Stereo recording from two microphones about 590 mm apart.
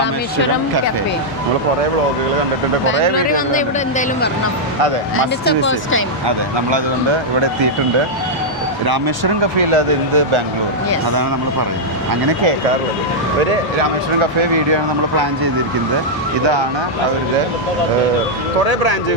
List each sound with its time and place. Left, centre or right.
3.2 s speech: centre
6.2 s speech: right
8.9 s speech: right
14.2 s speech: right
18.6 s speech: right